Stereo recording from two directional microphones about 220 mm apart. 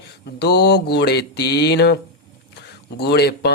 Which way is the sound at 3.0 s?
50° left (ahead or behind).